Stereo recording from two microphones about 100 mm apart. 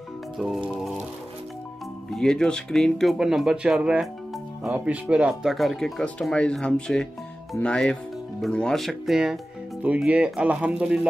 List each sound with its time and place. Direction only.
2.0 s speech: 5° left (ahead or behind); by 5.3 s 10° right (ahead or behind)
5.3 s speech: centre (ahead or behind)